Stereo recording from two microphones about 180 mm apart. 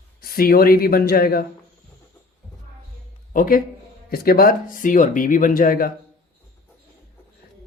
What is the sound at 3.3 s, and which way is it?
Speech, 50° left (ahead or behind).